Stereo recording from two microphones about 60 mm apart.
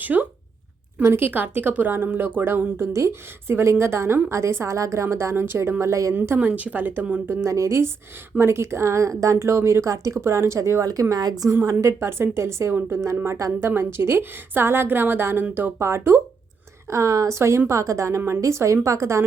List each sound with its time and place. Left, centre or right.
0.0 s speech: right
5.8 s a woman's voice: right
6.4 s speech: right
7.4 s a woman's voice: right
8.4 s speech: right
11.1 s a woman's voice: right
11.6 s a woman's voice: right
16.9 s a woman's voice: right